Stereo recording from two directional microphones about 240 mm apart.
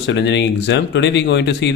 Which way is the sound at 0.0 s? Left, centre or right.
Left.